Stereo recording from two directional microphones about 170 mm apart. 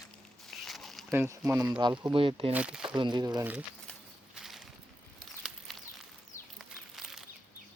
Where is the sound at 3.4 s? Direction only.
10° right (ahead or behind).